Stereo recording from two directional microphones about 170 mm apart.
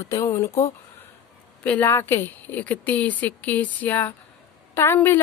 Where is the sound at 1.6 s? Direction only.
10° left (ahead or behind).